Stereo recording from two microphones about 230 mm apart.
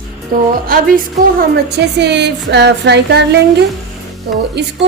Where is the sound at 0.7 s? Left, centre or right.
Right.